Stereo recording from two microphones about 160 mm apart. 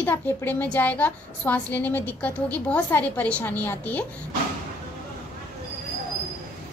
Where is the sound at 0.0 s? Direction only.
10° left (ahead or behind).